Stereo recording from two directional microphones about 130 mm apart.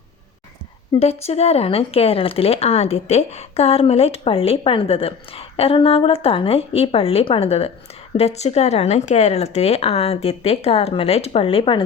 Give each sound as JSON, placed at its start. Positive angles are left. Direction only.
{"t": 0.9, "sound": "speech", "side_deg": 55}